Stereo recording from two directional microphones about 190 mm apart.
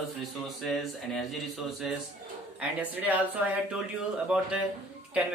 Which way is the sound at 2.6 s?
10° right (ahead or behind).